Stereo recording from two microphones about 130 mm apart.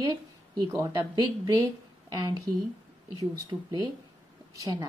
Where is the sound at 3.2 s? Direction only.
30° right (ahead or behind).